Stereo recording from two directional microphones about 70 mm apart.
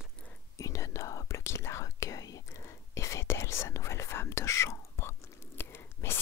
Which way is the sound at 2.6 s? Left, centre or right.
Left.